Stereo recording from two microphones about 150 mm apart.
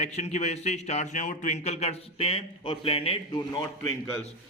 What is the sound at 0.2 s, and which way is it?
A man's voice, 50° left (ahead or behind).